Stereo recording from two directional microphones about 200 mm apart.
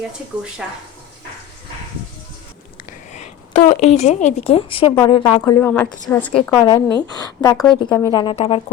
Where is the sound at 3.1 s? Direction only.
35° left (ahead or behind); by 6.4 s 5° left (ahead or behind).